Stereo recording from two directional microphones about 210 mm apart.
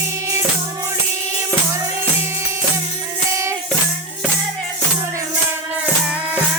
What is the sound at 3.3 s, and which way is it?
Music, 15° right (ahead or behind).